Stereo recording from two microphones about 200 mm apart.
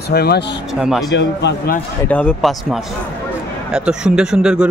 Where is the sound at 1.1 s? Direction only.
60° left (ahead or behind).